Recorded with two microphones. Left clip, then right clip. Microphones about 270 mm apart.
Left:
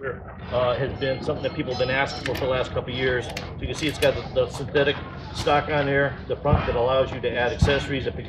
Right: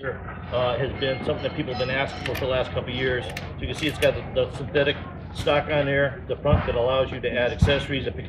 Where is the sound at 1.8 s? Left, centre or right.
Centre.